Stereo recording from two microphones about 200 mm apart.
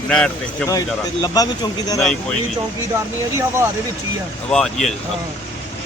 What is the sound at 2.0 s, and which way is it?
Speech, 5° left (ahead or behind).